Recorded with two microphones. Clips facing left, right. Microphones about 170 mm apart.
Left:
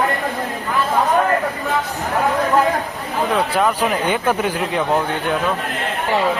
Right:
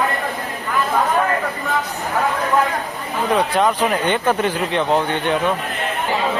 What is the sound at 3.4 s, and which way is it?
Speech, 5° left (ahead or behind).